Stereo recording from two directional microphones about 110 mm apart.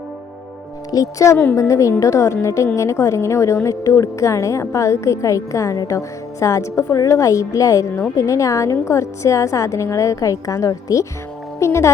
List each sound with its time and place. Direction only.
0.9 s a woman's voice: 30° left (ahead or behind)